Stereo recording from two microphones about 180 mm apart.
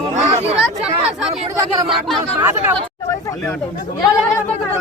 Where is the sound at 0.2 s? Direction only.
35° right (ahead or behind).